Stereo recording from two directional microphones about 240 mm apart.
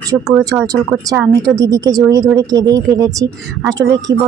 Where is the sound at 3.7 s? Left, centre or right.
Centre.